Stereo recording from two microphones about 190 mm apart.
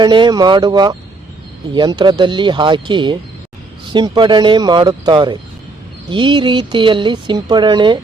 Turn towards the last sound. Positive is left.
turn(degrees=-25)  # may be behind; listen again after turning